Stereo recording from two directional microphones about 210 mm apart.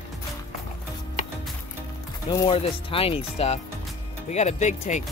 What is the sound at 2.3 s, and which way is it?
Speech, 25° left (ahead or behind).